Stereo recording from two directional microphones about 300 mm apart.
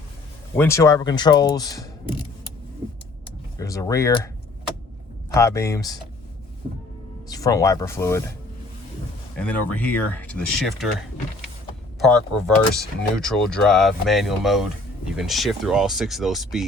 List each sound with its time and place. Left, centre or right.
0.5 s speech: centre
3.6 s speech: centre
5.3 s speech: centre
7.3 s speech: centre
9.3 s speech: centre
11.9 s speech: centre